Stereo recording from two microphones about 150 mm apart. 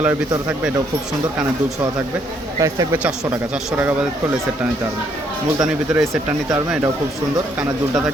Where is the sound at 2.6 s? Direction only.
20° right (ahead or behind).